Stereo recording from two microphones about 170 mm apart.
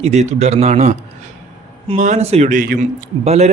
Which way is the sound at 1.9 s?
45° right (ahead or behind).